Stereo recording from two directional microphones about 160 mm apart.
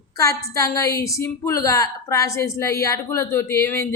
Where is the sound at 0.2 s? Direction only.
20° left (ahead or behind).